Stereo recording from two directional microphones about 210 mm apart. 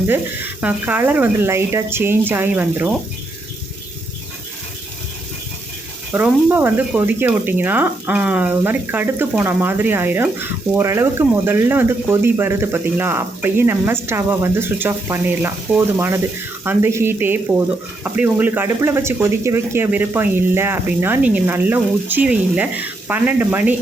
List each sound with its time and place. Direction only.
0.1 s speech: 10° right (ahead or behind)
6.1 s speech: 10° right (ahead or behind)